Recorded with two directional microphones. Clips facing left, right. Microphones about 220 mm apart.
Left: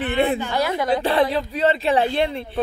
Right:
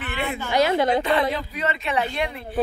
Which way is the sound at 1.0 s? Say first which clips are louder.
Left 3 dB; 30° left (ahead or behind).